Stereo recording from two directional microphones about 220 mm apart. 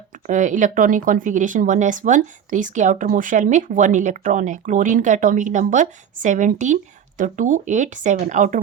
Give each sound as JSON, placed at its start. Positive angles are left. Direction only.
{"t": 0.3, "sound": "speech", "side_deg": -35}